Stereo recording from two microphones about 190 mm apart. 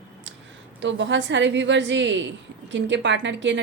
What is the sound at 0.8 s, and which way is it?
Speech, 70° right (ahead or behind).